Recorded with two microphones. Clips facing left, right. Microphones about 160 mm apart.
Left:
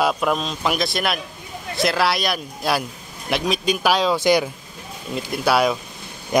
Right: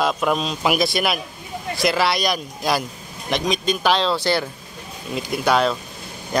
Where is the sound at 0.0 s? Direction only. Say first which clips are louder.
Even; centre (ahead or behind).